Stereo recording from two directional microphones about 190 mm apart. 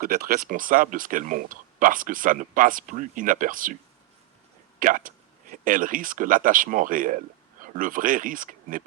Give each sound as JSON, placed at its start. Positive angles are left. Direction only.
{"t": 0.0, "sound": "speech", "side_deg": -55}
{"t": 4.8, "sound": "speech", "side_deg": -45}